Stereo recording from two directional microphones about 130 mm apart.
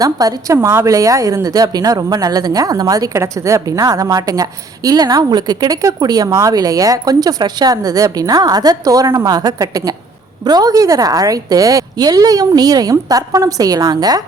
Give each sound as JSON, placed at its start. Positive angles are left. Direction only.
{"t": 0.0, "sound": "a woman's voice", "side_deg": -30}